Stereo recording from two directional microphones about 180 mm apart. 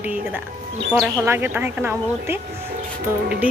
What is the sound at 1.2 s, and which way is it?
A woman's voice, 10° right (ahead or behind).